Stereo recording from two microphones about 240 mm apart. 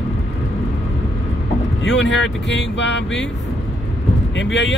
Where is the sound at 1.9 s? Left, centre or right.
Left.